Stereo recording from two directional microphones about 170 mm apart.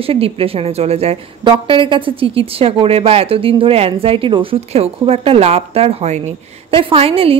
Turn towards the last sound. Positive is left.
turn(degrees=-35)  # may be behind; listen again after turning